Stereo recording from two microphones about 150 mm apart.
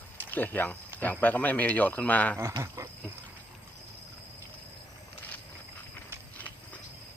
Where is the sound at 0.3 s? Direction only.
10° left (ahead or behind).